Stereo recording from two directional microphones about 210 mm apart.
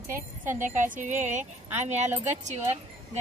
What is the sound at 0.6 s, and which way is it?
Speech, 35° right (ahead or behind).